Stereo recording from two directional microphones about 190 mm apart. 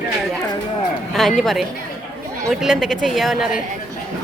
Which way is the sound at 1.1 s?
Centre (ahead or behind).